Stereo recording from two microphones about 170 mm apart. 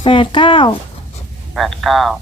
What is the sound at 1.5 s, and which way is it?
Speech, centre (ahead or behind).